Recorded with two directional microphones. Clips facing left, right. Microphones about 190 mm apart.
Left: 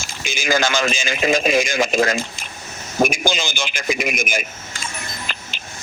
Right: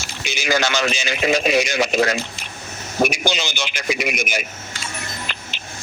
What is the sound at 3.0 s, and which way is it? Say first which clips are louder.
A man's voice: left 1 dB; 50° left (ahead or behind).